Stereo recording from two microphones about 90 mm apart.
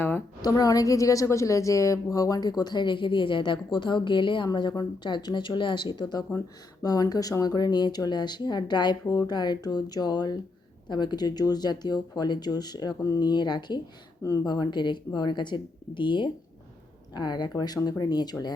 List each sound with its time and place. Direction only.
0.4 s a woman's voice: 45° left (ahead or behind); by 4.4 s 65° left (ahead or behind)
4.7 s speech: 50° left (ahead or behind)
6.8 s a woman's voice: 45° left (ahead or behind); by 16.3 s 65° left (ahead or behind)
17.2 s a woman's voice: 50° left (ahead or behind)